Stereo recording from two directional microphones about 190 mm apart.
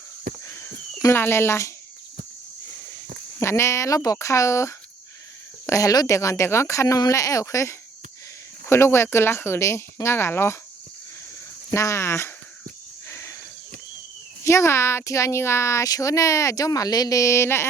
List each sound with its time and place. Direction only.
0.4 s a sound: 15° left (ahead or behind)
3.4 s speech: 15° left (ahead or behind)
11.7 s speech: 15° left (ahead or behind)
13.1 s cricket: 15° left (ahead or behind)
14.4 s speech: 15° left (ahead or behind)